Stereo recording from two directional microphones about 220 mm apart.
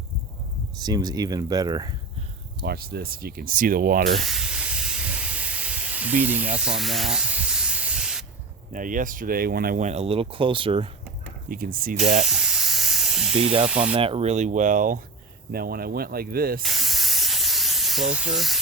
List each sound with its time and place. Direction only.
0.8 s speech: 15° right (ahead or behind)
2.6 s speech: 45° right (ahead or behind)
4.2 s steam: centre (ahead or behind)
6.6 s spray: centre (ahead or behind)
8.7 s speech: 35° right (ahead or behind)
11.4 s speech: 40° right (ahead or behind)
12.2 s hiss: centre (ahead or behind)
13.7 s speech: 5° right (ahead or behind)
13.9 s speech: 25° right (ahead or behind); by 16.6 s 40° right (ahead or behind)
16.6 s spray: centre (ahead or behind)